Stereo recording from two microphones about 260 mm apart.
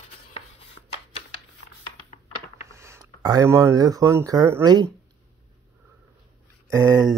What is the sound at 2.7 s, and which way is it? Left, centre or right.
Speech, centre.